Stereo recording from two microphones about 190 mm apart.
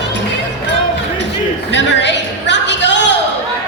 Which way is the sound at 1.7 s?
70° left (ahead or behind).